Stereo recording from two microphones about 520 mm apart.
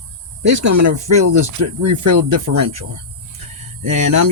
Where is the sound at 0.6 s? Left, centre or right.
Right.